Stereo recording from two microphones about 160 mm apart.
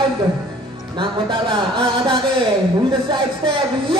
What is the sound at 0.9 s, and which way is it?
Music, 30° right (ahead or behind).